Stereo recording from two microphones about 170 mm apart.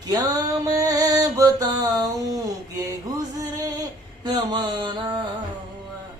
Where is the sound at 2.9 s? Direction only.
20° right (ahead or behind).